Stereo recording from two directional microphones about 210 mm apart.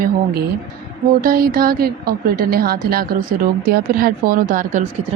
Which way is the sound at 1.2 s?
45° right (ahead or behind).